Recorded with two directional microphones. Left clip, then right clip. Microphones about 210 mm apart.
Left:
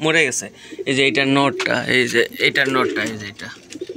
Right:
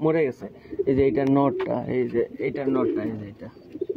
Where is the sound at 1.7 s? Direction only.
60° left (ahead or behind).